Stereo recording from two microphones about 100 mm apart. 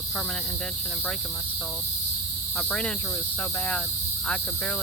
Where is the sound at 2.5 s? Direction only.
10° left (ahead or behind).